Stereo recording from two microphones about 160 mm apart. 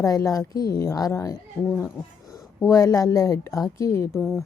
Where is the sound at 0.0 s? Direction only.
20° left (ahead or behind).